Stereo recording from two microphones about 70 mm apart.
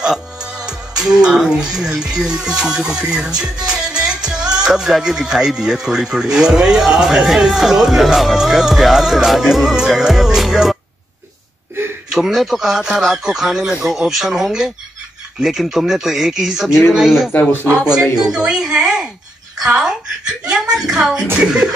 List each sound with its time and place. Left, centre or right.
0.0 s music: centre
0.7 s speech: centre
12.1 s speech: centre
17.3 s speech: left
18.2 s speech: centre